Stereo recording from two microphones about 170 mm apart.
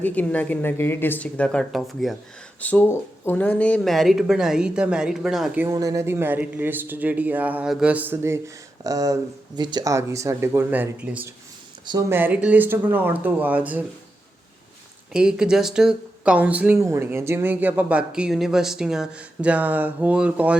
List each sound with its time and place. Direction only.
0.0 s speech: 10° left (ahead or behind)
5.6 s speech: 20° right (ahead or behind)
15.1 s speech: 5° right (ahead or behind)